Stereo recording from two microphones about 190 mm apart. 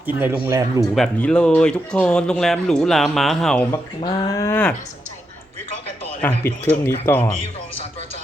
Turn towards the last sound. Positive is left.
turn(degrees=10)  # may be behind; listen again after turning